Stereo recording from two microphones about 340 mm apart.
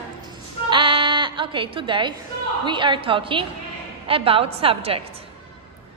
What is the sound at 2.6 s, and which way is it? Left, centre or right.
A woman's voice, centre.